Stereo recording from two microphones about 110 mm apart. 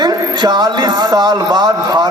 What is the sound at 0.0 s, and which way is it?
Speech, 40° right (ahead or behind).